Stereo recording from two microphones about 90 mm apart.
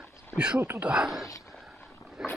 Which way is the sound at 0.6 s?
25° right (ahead or behind).